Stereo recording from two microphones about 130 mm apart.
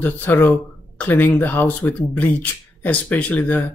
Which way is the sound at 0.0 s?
15° left (ahead or behind).